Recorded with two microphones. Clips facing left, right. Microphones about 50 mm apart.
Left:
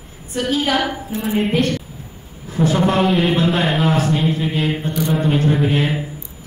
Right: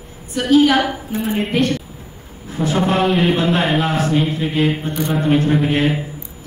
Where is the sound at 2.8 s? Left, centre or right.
Centre.